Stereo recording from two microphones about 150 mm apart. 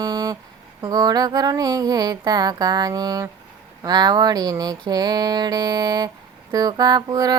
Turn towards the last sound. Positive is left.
turn(degrees=-25)  # may be behind; listen again after turning